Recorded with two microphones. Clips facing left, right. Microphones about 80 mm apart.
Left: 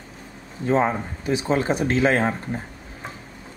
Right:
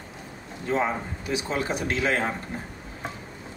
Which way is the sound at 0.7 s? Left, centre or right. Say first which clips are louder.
Left 5 dB; left.